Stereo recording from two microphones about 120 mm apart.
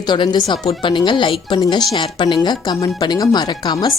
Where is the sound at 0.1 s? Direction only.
35° left (ahead or behind).